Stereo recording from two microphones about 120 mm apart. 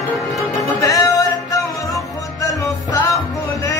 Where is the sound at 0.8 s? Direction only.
30° left (ahead or behind).